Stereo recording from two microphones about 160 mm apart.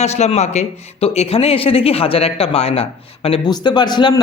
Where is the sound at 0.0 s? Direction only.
45° left (ahead or behind).